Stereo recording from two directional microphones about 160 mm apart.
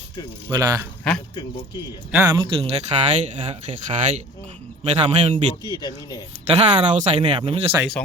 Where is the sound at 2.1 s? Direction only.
20° right (ahead or behind).